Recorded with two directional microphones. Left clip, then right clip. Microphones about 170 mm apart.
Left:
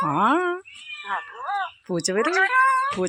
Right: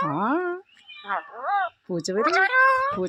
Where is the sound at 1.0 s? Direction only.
25° right (ahead or behind).